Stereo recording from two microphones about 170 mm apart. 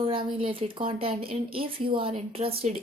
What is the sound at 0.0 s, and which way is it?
Speech, 30° right (ahead or behind).